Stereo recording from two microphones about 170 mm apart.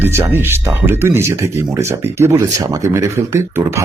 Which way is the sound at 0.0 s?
15° right (ahead or behind).